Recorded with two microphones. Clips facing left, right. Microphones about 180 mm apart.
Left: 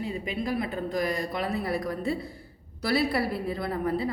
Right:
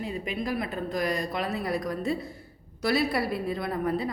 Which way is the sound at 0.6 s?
25° left (ahead or behind).